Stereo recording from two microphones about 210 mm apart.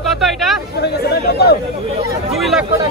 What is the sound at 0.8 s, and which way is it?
Speech, 50° left (ahead or behind).